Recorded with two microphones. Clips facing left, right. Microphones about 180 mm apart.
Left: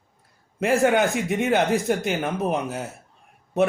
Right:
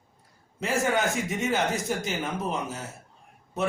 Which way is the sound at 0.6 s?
60° left (ahead or behind).